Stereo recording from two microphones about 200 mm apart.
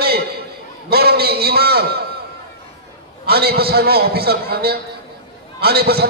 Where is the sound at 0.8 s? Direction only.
50° right (ahead or behind).